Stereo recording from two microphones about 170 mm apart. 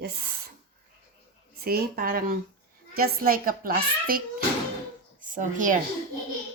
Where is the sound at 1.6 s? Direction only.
60° right (ahead or behind).